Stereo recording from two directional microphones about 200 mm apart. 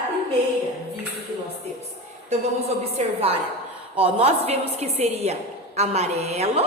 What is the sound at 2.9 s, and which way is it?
A woman's voice, 30° right (ahead or behind).